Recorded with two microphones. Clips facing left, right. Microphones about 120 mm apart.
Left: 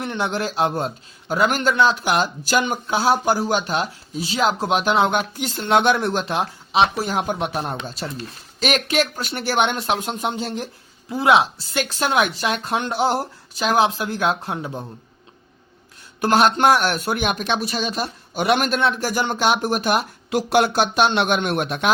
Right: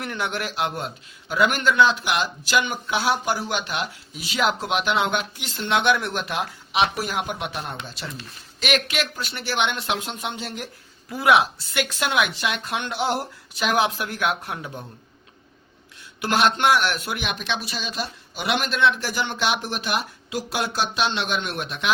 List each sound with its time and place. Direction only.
0.0 s speech: 25° left (ahead or behind)
16.2 s speech: 40° left (ahead or behind)